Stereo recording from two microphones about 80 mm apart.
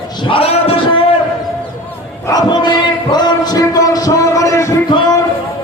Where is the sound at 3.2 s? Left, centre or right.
Left.